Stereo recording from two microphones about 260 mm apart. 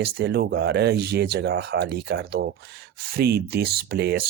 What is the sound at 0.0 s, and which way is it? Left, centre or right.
Speech, right.